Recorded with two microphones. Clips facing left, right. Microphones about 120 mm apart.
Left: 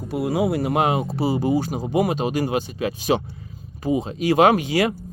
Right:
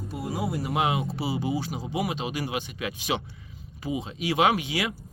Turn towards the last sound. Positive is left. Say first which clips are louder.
# left 7 dB
turn(degrees=45)  # may be behind; listen again after turning